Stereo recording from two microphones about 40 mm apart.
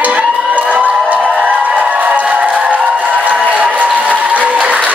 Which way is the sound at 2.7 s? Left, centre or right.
Right.